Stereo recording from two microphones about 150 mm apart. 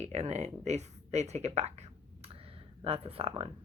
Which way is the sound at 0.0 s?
45° right (ahead or behind).